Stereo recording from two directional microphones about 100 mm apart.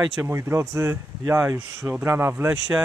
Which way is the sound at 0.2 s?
25° right (ahead or behind).